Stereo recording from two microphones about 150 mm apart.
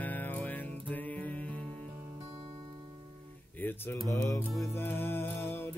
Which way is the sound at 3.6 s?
15° left (ahead or behind).